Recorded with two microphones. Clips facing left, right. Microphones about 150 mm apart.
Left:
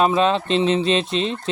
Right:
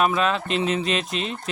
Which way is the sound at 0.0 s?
30° left (ahead or behind).